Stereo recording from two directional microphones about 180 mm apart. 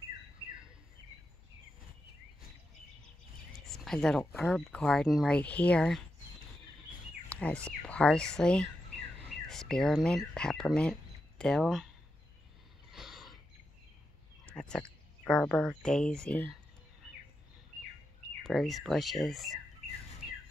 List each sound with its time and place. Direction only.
3.5 s a sound: centre (ahead or behind)
4.2 s speech: 5° left (ahead or behind)
7.2 s speech: 5° left (ahead or behind)
12.9 s mechanisms: centre (ahead or behind)
14.4 s speech: 5° left (ahead or behind)
18.4 s speech: centre (ahead or behind)